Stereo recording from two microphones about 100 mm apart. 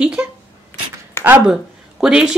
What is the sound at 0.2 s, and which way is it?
Speech, 25° right (ahead or behind).